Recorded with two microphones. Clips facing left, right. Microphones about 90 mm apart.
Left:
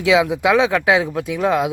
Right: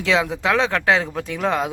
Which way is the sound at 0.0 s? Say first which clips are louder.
Left 5 dB; 10° left (ahead or behind).